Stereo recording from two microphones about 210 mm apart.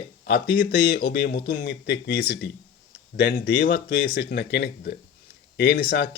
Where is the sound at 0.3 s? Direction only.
50° left (ahead or behind).